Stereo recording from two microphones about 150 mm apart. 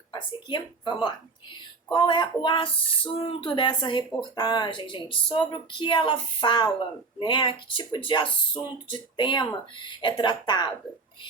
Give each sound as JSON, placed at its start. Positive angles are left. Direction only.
{"t": 0.1, "sound": "a woman's voice", "side_deg": 30}